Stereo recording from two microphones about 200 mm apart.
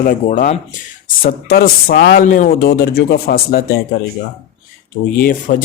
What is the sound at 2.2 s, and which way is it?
Speech, 40° left (ahead or behind).